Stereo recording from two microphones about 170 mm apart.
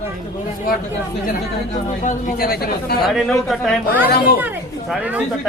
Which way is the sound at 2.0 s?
50° left (ahead or behind).